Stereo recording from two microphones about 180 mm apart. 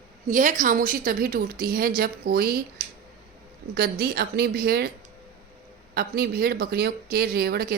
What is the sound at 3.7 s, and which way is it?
Speech, 60° right (ahead or behind).